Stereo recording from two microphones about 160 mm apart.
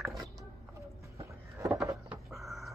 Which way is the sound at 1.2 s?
20° right (ahead or behind).